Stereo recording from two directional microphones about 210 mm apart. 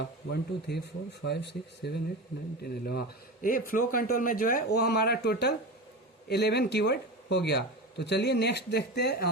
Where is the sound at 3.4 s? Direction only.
40° left (ahead or behind).